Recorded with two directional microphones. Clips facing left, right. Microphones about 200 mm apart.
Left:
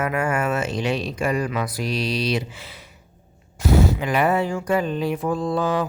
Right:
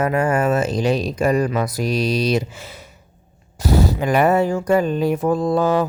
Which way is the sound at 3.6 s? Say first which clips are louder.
Right 1 dB; 35° right (ahead or behind).